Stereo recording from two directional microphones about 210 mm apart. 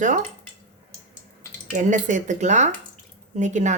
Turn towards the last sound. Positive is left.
turn(degrees=-35)  # may be behind; listen again after turning